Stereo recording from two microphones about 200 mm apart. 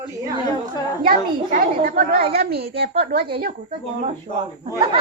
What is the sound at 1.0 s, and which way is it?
Speech, 45° right (ahead or behind).